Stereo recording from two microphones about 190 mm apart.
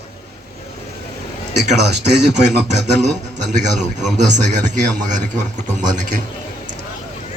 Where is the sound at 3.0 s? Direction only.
40° right (ahead or behind).